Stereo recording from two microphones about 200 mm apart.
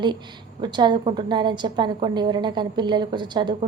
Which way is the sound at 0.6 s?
20° right (ahead or behind).